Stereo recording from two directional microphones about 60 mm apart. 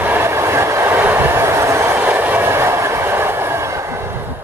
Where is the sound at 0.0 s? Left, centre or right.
Right.